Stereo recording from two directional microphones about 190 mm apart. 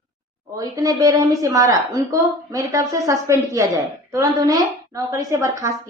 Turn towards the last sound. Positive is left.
turn(degrees=-15)  # may be behind; listen again after turning